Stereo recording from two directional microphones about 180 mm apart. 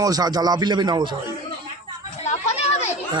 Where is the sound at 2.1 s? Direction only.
40° left (ahead or behind).